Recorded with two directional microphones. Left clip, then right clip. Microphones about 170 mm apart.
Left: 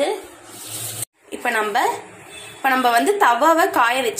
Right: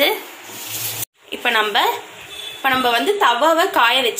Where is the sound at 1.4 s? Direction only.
5° left (ahead or behind).